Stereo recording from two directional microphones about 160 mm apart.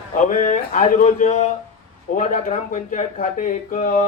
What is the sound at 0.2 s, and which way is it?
Speech, 50° left (ahead or behind).